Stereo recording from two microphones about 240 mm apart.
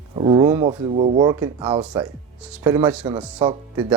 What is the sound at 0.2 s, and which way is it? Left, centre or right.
Speech, centre.